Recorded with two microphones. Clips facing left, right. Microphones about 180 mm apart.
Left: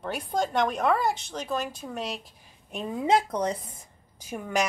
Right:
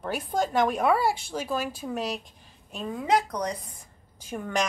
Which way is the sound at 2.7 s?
20° left (ahead or behind).